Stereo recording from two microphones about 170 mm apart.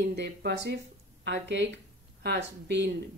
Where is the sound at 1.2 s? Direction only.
90° right.